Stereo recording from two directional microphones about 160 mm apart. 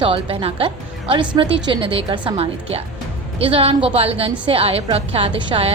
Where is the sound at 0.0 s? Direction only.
35° right (ahead or behind).